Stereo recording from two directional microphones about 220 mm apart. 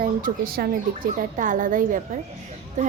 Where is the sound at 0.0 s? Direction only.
40° right (ahead or behind).